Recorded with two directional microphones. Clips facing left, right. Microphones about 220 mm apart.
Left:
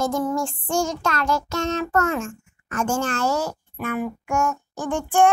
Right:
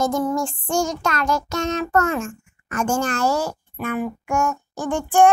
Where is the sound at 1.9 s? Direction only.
Centre (ahead or behind).